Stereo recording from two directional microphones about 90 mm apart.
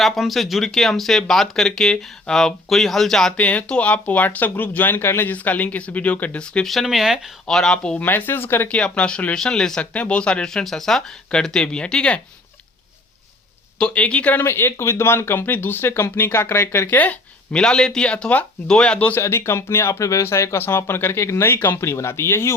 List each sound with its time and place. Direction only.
0.0 s speech: centre (ahead or behind)
3.4 s speech: 15° left (ahead or behind); by 7.3 s 5° right (ahead or behind)
7.4 s speech: 5° left (ahead or behind)
7.9 s speech: 20° left (ahead or behind)
13.7 s speech: 15° left (ahead or behind)
14.4 s speech: 25° left (ahead or behind)
19.2 s speech: 30° left (ahead or behind)